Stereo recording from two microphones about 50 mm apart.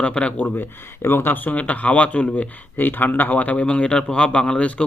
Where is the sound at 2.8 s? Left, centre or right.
Left.